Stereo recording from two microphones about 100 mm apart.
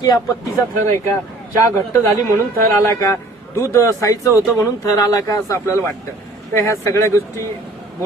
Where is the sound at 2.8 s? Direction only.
30° left (ahead or behind).